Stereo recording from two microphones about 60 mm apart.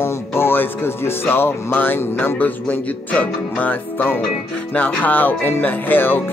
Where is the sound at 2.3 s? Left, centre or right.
Left.